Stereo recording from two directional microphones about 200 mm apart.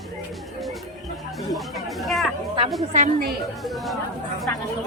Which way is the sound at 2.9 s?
40° right (ahead or behind).